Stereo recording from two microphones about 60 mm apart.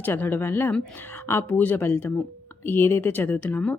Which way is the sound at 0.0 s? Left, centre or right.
Left.